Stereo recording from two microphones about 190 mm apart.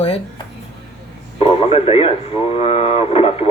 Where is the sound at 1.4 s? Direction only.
30° left (ahead or behind).